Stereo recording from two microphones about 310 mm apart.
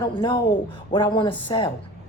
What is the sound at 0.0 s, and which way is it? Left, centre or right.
Speech, centre.